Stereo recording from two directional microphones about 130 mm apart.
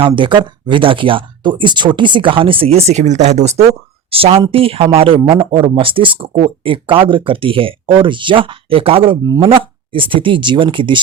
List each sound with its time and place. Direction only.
0.2 s speech: 40° right (ahead or behind); by 3.7 s 55° right (ahead or behind)
4.1 s speech: 45° right (ahead or behind)